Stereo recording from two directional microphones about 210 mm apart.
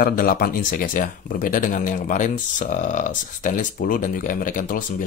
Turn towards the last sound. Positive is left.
turn(degrees=40)  # may be behind; listen again after turning